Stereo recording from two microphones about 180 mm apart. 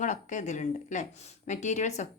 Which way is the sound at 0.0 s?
45° left (ahead or behind).